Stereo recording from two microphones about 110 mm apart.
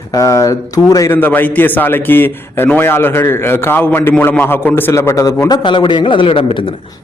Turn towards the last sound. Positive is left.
turn(degrees=55)  # may be behind; listen again after turning